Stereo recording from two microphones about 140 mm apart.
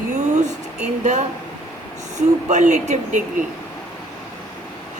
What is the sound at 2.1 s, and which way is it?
A woman's voice, 60° right (ahead or behind).